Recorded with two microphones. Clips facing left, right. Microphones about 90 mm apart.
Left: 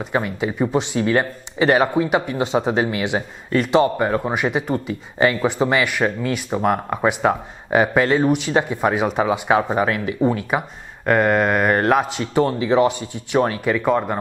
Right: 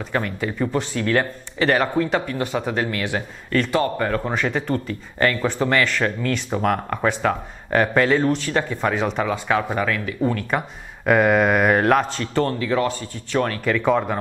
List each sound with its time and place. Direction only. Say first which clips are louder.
0.0 s speech: left 2 dB; 10° left (ahead or behind)
11.1 s speech: even; centre (ahead or behind)